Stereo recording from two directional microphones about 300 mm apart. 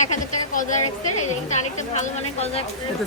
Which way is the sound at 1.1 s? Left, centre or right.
Left.